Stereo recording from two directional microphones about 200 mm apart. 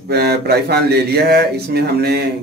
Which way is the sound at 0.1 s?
55° right (ahead or behind).